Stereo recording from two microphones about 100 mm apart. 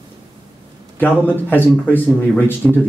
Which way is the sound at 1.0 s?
20° left (ahead or behind).